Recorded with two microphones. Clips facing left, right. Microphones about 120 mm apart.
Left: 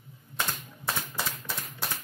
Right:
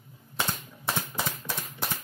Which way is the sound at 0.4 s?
20° right (ahead or behind).